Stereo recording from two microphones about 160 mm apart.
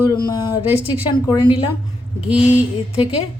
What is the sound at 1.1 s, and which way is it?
Speech, 30° left (ahead or behind).